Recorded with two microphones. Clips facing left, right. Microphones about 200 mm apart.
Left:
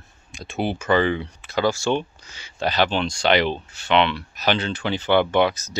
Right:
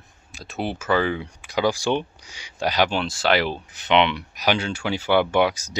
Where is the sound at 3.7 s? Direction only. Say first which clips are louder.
Right 1 dB; 20° right (ahead or behind).